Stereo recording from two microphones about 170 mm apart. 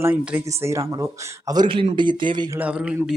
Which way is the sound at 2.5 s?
5° right (ahead or behind).